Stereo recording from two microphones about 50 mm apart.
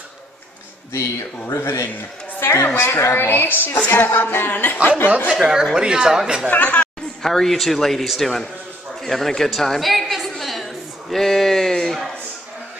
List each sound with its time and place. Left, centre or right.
1.5 s a woman's voice: left
3.1 s music: left
3.9 s speech: left
5.4 s speech: centre
6.5 s speech: left
7.2 s a man's voice: centre
9.0 s a sound: centre